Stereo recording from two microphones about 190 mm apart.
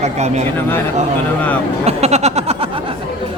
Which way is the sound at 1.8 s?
35° right (ahead or behind).